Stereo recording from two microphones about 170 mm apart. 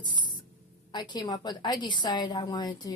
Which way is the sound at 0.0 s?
25° left (ahead or behind).